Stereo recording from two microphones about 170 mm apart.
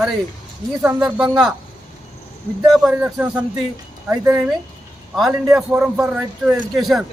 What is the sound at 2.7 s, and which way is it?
A man's voice, 5° right (ahead or behind).